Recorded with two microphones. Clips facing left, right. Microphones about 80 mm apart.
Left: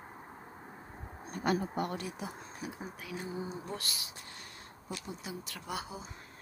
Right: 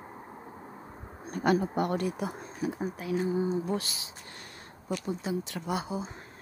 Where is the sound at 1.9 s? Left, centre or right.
Right.